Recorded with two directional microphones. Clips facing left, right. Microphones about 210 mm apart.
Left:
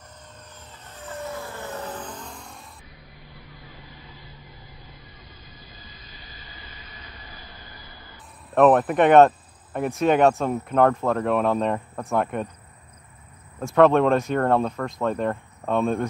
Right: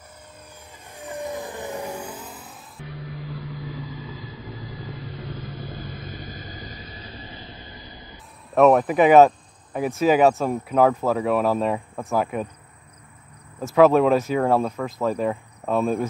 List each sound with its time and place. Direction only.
0.9 s vehicle: 15° right (ahead or behind)
2.9 s vehicle: 85° right; by 8.2 s 20° right (ahead or behind)
8.5 s speech: centre (ahead or behind)
13.6 s speech: 5° right (ahead or behind)